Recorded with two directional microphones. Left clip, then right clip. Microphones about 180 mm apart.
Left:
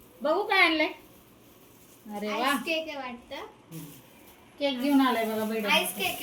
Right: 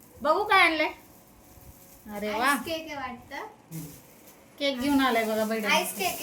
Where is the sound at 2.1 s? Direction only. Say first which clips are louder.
Right 2 dB; 20° left (ahead or behind).